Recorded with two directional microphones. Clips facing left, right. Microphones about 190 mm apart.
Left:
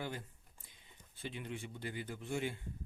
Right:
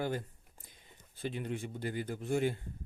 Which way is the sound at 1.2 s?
40° right (ahead or behind).